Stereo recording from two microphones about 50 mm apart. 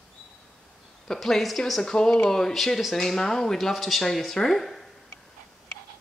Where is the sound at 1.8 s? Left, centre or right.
Centre.